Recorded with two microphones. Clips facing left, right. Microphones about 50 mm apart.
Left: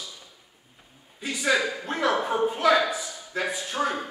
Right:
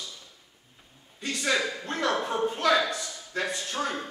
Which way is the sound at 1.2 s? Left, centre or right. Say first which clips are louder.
Left 3 dB; centre.